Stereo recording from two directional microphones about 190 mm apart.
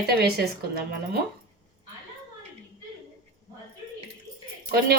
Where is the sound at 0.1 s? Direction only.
55° right (ahead or behind).